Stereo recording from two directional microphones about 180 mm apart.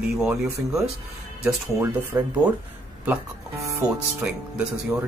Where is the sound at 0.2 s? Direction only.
5° right (ahead or behind).